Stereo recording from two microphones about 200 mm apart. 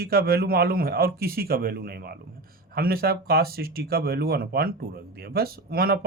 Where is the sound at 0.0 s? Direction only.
50° right (ahead or behind).